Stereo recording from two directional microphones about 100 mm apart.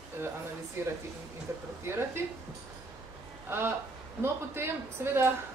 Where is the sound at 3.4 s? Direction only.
25° right (ahead or behind).